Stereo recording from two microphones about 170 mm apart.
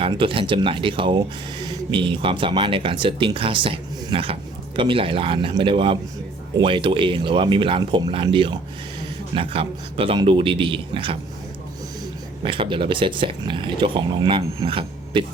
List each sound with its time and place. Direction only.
0.0 s speech: 30° right (ahead or behind)
12.4 s speech: 30° right (ahead or behind)